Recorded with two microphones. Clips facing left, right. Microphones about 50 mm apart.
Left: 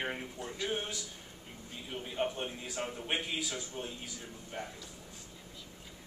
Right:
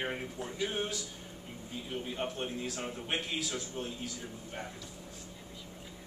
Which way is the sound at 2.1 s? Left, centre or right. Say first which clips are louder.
Left 4 dB; centre.